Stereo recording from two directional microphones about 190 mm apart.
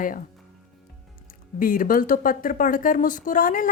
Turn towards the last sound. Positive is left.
turn(degrees=45)  # may be behind; listen again after turning